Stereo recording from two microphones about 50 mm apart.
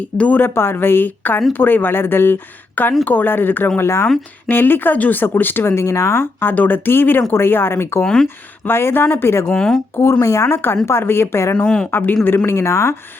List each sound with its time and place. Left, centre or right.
0.2 s speech: left
0.5 s speech: left
3.8 s a woman's voice: left
4.4 s speech: left
5.7 s speech: left
6.4 s speech: left
8.0 s speech: centre
8.6 s speech: left
9.5 s speech: centre
9.9 s speech: left
10.5 s a woman's voice: left
11.5 s speech: centre
11.9 s speech: left
12.5 s speech: left